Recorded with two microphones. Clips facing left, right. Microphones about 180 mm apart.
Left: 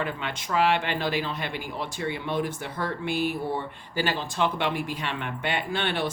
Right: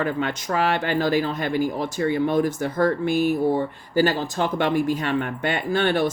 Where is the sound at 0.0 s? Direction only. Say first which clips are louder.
Right 7 dB; 45° right (ahead or behind).